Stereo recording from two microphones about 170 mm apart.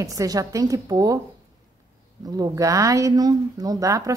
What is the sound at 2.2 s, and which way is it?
A woman's voice, 20° right (ahead or behind).